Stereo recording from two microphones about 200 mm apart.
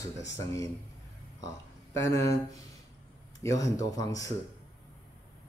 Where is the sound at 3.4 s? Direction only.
15° left (ahead or behind).